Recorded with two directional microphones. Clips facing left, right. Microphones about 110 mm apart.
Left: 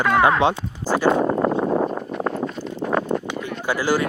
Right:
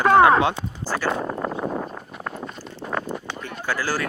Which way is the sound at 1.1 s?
50° left (ahead or behind).